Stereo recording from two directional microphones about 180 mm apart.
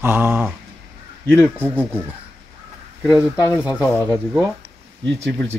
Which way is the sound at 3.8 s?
5° left (ahead or behind).